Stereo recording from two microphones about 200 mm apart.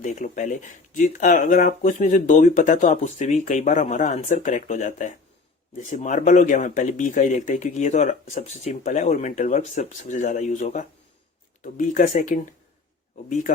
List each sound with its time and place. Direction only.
0.0 s speech: 40° left (ahead or behind)